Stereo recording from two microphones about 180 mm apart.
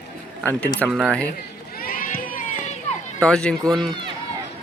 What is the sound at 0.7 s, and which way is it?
Speech, centre (ahead or behind).